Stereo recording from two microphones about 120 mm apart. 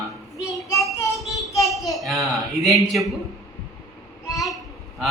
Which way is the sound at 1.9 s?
Centre (ahead or behind).